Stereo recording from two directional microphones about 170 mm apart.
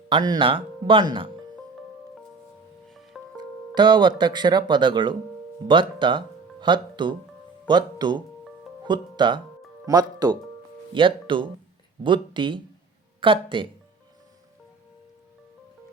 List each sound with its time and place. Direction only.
0.1 s speech: 25° right (ahead or behind)
2.9 s music: centre (ahead or behind)
3.3 s music: 25° right (ahead or behind)
4.2 s speech: 25° right (ahead or behind)